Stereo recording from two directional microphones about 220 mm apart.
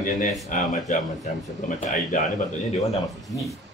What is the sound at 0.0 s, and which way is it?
Speech, 35° left (ahead or behind).